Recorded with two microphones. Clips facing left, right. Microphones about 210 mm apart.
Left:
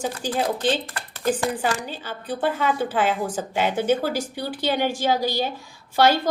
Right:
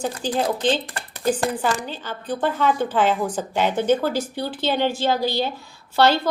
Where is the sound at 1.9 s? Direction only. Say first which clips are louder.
Right 2 dB; 10° left (ahead or behind).